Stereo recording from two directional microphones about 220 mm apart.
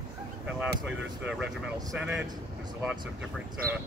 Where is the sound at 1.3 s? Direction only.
5° right (ahead or behind).